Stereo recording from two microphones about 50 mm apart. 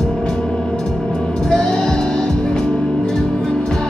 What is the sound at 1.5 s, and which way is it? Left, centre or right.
Music, centre.